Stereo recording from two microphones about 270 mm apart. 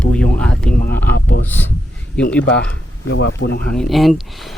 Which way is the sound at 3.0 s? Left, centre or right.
Left.